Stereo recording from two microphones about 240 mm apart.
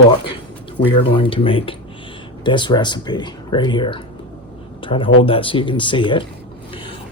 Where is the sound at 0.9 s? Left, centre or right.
Left.